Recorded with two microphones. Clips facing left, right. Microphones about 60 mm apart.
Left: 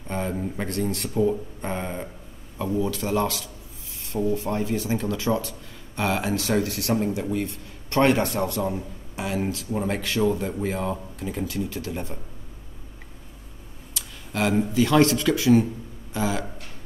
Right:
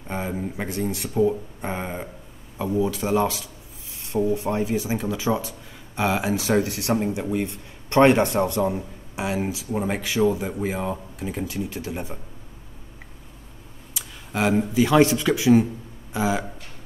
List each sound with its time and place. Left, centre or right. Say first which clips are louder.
0.1 s speech: even; centre
13.9 s speech: right 1 dB; centre